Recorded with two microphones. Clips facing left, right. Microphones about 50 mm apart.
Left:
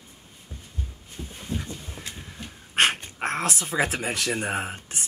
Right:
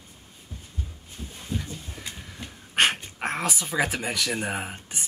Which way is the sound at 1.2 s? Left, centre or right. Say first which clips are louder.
Even; centre.